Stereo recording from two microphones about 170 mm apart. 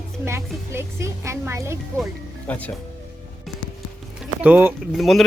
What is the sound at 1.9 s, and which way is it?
Speech, 5° left (ahead or behind).